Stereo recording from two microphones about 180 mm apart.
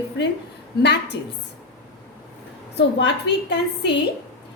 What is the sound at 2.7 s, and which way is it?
A woman's voice, 70° left (ahead or behind).